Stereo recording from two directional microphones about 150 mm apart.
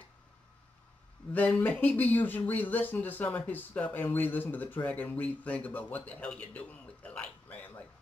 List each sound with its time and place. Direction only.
1.3 s speech: 10° left (ahead or behind)